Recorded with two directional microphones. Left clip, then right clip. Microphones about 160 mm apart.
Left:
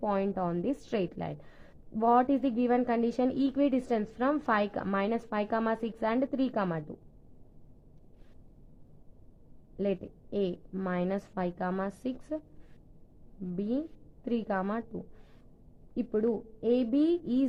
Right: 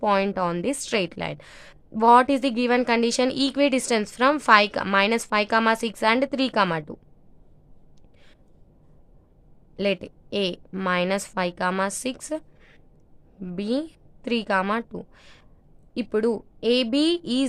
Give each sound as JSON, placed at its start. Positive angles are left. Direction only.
{"t": 0.0, "sound": "speech", "side_deg": -35}
{"t": 9.7, "sound": "a woman's voice", "side_deg": -30}
{"t": 16.6, "sound": "a woman's voice", "side_deg": -30}